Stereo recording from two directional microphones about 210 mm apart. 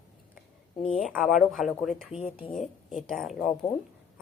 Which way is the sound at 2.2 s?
40° left (ahead or behind).